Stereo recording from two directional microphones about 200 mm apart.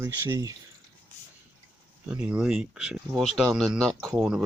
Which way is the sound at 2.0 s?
5° right (ahead or behind).